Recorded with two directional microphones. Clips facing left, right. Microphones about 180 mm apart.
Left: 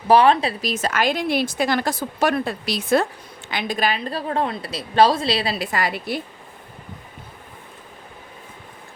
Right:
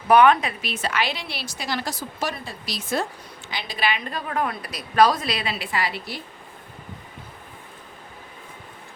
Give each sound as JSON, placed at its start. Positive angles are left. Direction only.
{"t": 0.1, "sound": "a woman's voice", "side_deg": 30}